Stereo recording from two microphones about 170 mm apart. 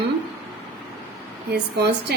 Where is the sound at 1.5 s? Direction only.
70° right (ahead or behind).